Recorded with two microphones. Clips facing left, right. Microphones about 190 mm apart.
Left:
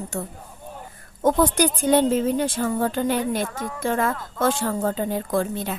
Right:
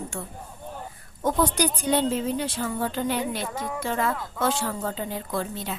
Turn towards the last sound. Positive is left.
turn(degrees=50)  # may be behind; listen again after turning